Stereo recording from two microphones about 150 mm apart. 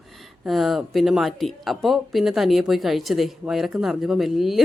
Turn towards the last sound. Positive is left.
turn(degrees=0)  # may be behind; listen again after turning